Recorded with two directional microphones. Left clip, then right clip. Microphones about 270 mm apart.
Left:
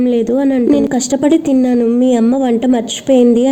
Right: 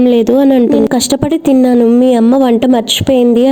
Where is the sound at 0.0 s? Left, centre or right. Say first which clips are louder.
Right 5 dB; right.